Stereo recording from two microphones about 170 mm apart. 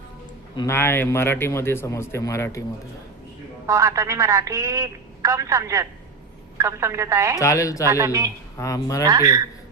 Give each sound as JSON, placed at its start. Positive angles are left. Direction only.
{"t": 0.5, "sound": "a man's voice", "side_deg": 20}
{"t": 3.7, "sound": "speech", "side_deg": -20}
{"t": 7.3, "sound": "speech", "side_deg": 20}
{"t": 7.9, "sound": "speech", "side_deg": -15}
{"t": 8.5, "sound": "speech", "side_deg": 20}
{"t": 9.0, "sound": "speech", "side_deg": -20}